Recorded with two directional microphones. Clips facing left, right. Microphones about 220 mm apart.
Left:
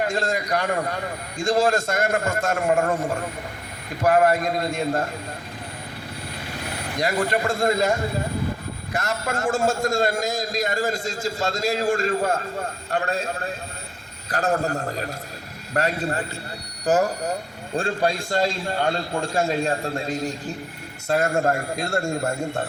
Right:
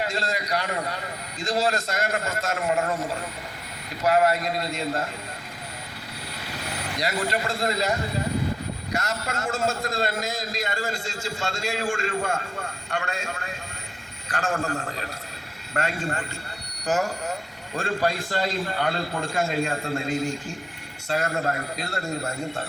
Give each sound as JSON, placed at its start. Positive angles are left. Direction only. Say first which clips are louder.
{"t": 0.0, "sound": "a man's voice", "louder": "left 4 dB", "side_deg": 50}
{"t": 4.0, "sound": "a man's voice", "louder": "left 3 dB", "side_deg": 50}
{"t": 6.9, "sound": "a man's voice", "louder": "left 4 dB", "side_deg": 50}
{"t": 9.2, "sound": "a man's voice", "louder": "left 8 dB", "side_deg": 45}
{"t": 17.7, "sound": "speech", "louder": "left 2 dB", "side_deg": 30}
{"t": 21.1, "sound": "a man's voice", "louder": "left 5 dB", "side_deg": 45}